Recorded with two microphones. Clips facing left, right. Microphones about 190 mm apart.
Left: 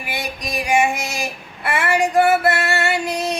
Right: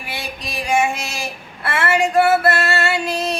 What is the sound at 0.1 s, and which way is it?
Female singing, 15° left (ahead or behind).